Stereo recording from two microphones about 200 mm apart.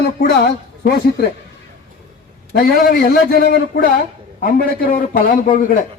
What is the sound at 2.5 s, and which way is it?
Speech, 50° left (ahead or behind).